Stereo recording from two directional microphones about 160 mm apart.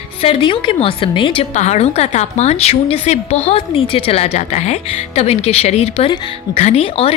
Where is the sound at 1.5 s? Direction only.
45° left (ahead or behind).